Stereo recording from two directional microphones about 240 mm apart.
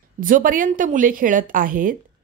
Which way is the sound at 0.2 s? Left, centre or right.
Right.